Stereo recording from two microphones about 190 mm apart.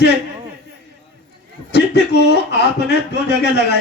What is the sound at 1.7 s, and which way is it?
Speech, 60° left (ahead or behind).